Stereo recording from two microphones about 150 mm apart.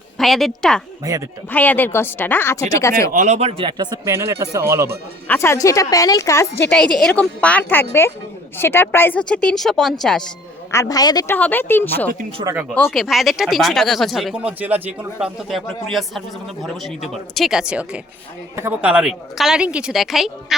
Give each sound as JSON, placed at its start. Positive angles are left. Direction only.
{"t": 0.2, "sound": "a woman's voice", "side_deg": 0}
{"t": 3.1, "sound": "speech", "side_deg": -55}
{"t": 3.6, "sound": "speech", "side_deg": -30}
{"t": 5.3, "sound": "a woman's voice", "side_deg": 15}
{"t": 6.7, "sound": "a woman's voice", "side_deg": 5}
{"t": 10.7, "sound": "a woman's voice", "side_deg": 20}
{"t": 11.3, "sound": "a woman's voice", "side_deg": 10}